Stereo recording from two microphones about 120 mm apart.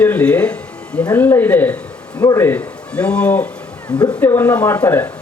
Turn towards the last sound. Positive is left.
turn(degrees=15)  # may be behind; listen again after turning